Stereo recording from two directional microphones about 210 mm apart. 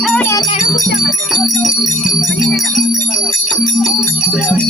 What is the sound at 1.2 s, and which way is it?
Jingle bell, centre (ahead or behind).